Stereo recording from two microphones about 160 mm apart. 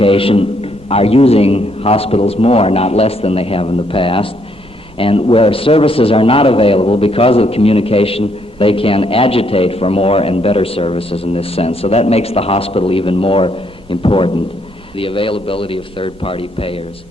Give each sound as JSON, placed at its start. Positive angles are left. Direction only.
{"t": 0.0, "sound": "a man's voice", "side_deg": 35}